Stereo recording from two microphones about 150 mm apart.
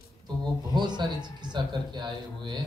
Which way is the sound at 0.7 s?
30° right (ahead or behind).